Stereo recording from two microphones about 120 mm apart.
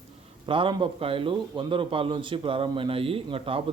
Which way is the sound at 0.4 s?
45° right (ahead or behind).